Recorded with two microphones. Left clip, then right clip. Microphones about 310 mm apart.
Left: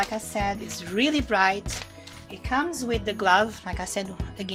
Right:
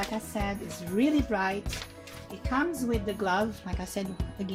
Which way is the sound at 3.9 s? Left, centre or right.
Left.